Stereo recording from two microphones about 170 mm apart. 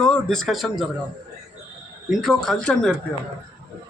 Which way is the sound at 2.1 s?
Centre (ahead or behind).